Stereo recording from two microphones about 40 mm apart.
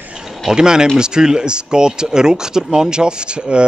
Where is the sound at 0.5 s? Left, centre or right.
Centre.